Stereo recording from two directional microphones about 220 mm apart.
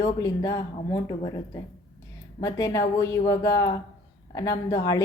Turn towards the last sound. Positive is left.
turn(degrees=15)  # may be behind; listen again after turning